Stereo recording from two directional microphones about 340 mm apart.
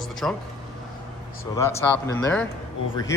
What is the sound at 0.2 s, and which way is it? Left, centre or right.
Speech, centre.